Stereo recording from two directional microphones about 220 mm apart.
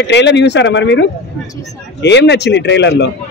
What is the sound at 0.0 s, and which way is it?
A man's voice, 50° left (ahead or behind).